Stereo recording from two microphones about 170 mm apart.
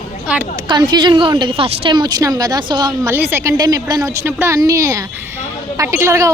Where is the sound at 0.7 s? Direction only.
25° right (ahead or behind).